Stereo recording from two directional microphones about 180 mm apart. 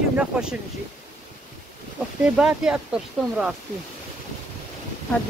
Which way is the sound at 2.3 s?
5° right (ahead or behind).